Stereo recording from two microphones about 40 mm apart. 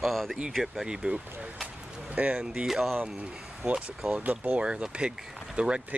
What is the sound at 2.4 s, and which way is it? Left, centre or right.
Speech, right.